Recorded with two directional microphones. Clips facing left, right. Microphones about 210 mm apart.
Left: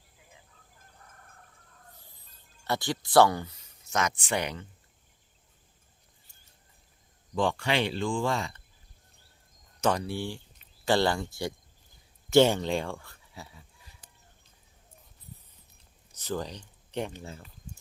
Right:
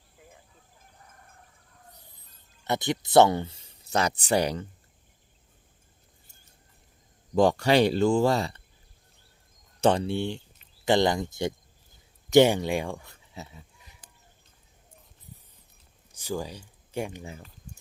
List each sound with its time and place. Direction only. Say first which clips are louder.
2.6 s speech: right 3 dB; 20° right (ahead or behind); by 4.6 s 35° right (ahead or behind)
7.3 s speech: right 7 dB; 40° right (ahead or behind)
9.8 s speech: right 5 dB; 25° right (ahead or behind)
16.1 s speech: right 1 dB; 10° right (ahead or behind)